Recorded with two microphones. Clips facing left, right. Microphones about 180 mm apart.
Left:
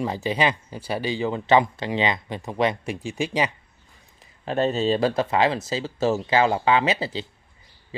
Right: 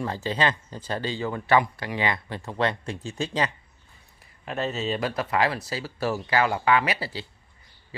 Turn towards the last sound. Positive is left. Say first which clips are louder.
# left 2 dB
turn(degrees=20)  # may be behind; listen again after turning